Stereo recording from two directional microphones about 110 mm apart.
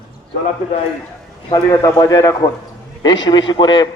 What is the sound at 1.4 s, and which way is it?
A man's voice, 35° left (ahead or behind).